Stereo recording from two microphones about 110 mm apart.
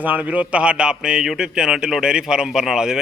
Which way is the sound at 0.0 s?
15° right (ahead or behind).